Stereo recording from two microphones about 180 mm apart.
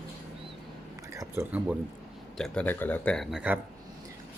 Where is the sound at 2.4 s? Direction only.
5° left (ahead or behind).